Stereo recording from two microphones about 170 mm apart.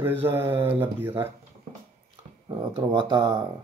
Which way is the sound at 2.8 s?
25° right (ahead or behind).